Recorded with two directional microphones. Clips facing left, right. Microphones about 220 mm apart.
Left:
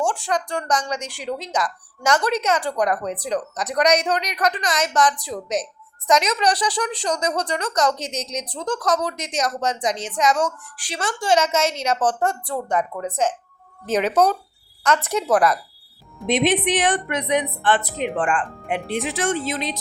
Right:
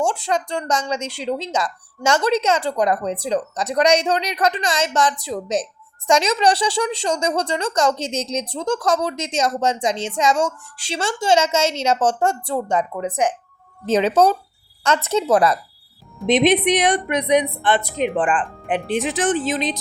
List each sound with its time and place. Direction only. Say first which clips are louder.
0.0 s a woman's voice: right 2 dB; 25° right (ahead or behind)
13.8 s a woman's voice: right 3 dB; 25° right (ahead or behind)